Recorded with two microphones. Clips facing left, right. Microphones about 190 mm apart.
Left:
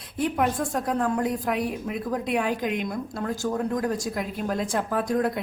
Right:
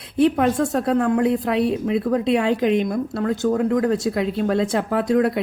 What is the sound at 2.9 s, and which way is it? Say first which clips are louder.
Speech: right 7 dB; 65° right (ahead or behind).